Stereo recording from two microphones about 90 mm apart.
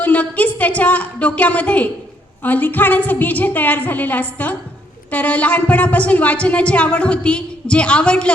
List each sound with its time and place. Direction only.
0.0 s a woman's voice: 15° left (ahead or behind)